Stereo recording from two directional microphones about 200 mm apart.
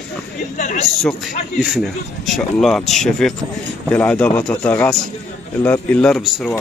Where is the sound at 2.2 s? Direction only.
Centre (ahead or behind).